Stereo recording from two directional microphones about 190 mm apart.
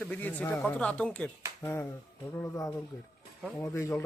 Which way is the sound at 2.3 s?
15° left (ahead or behind).